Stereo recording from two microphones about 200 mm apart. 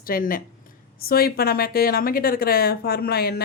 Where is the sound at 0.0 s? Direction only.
45° left (ahead or behind).